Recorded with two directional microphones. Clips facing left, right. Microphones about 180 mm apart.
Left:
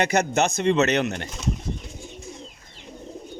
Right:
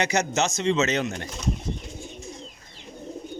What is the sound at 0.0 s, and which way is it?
A man's voice, 55° left (ahead or behind).